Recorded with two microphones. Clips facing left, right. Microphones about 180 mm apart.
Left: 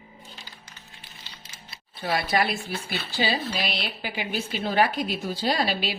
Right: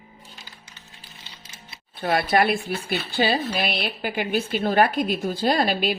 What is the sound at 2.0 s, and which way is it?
Speech, 55° right (ahead or behind).